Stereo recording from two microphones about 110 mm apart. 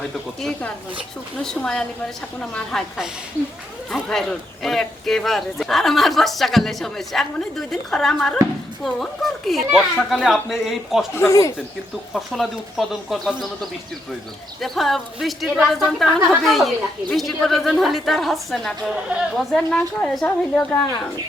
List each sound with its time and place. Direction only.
0.0 s speech: 5° left (ahead or behind)
11.1 s speech: 25° left (ahead or behind)
12.1 s a woman's voice: 5° right (ahead or behind)